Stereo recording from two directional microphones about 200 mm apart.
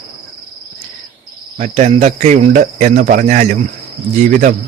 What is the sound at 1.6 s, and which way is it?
Speech, 35° right (ahead or behind).